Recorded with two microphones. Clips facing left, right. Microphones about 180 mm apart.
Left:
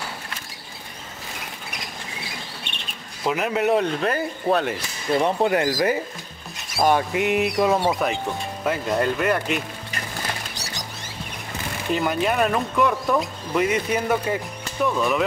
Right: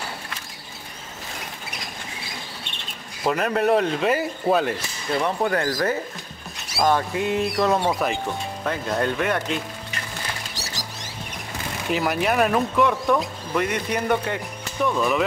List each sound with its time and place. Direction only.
3.3 s speech: 5° left (ahead or behind)
5.1 s speech: 20° left (ahead or behind)
6.8 s a sound: 15° left (ahead or behind)
7.7 s speech: centre (ahead or behind)
11.9 s speech: centre (ahead or behind)